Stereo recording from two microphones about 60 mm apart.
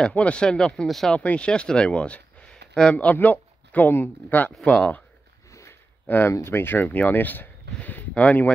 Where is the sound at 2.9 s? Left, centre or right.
Left.